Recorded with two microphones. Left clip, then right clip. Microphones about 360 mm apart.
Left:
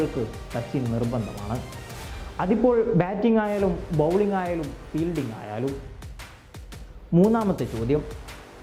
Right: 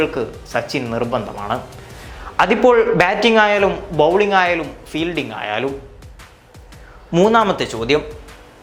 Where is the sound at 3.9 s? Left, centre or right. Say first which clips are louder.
Right 9 dB; right.